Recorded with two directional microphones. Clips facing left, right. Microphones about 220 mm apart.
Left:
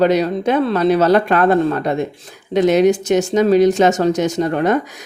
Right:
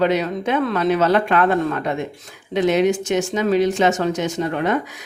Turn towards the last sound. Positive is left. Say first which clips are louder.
# left 4 dB
turn(degrees=40)  # may be behind; listen again after turning